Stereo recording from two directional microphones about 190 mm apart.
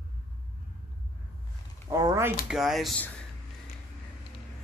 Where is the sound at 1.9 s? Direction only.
15° right (ahead or behind).